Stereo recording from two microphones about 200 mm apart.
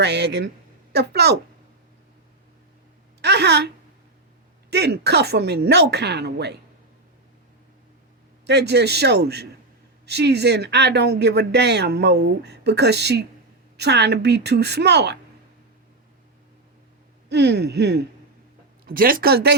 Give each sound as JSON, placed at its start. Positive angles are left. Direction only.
{"t": 0.0, "sound": "speech", "side_deg": -55}
{"t": 3.2, "sound": "a woman's voice", "side_deg": -55}
{"t": 4.7, "sound": "speech", "side_deg": -55}
{"t": 8.4, "sound": "speech", "side_deg": -55}
{"t": 17.2, "sound": "speech", "side_deg": -55}
{"t": 18.9, "sound": "speech", "side_deg": -45}